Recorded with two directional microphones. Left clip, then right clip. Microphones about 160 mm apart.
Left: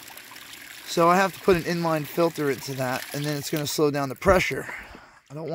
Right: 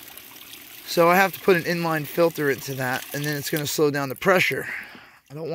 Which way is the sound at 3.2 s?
5° left (ahead or behind).